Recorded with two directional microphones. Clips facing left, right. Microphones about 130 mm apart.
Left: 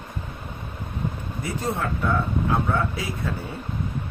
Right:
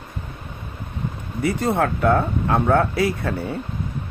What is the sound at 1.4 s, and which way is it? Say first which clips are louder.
Speech: right 8 dB; 70° right (ahead or behind).